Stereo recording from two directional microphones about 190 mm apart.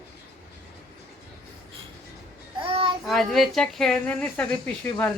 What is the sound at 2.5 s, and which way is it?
Child singing, 25° right (ahead or behind).